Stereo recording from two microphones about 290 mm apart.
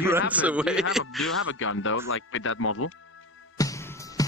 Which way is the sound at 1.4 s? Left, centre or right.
Left.